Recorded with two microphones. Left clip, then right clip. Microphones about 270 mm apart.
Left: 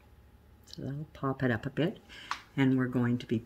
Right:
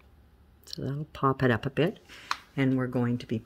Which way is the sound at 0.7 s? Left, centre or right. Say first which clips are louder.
Right 6 dB; right.